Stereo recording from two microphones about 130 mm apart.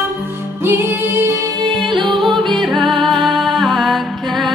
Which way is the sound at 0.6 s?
20° right (ahead or behind).